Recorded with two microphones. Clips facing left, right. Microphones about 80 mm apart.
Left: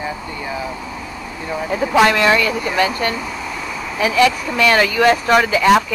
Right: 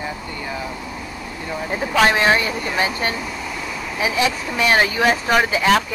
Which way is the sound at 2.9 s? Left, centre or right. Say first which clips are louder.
Left 3 dB; centre.